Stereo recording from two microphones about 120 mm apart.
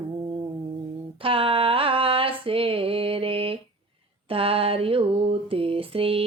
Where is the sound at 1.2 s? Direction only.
50° right (ahead or behind).